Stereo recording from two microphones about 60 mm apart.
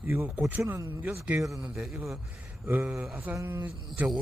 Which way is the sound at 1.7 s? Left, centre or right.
Centre.